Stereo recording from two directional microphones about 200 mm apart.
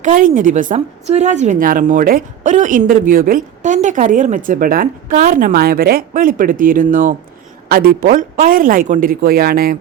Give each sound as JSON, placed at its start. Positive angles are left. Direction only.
{"t": 0.0, "sound": "a woman's voice", "side_deg": -40}